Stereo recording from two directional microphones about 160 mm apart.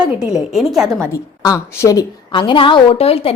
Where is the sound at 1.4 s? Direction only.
20° left (ahead or behind).